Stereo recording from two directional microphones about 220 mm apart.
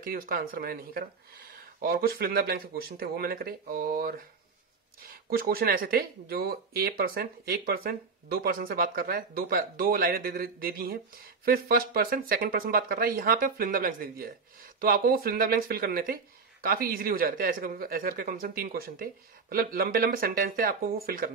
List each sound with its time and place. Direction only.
0.0 s speech: 40° right (ahead or behind)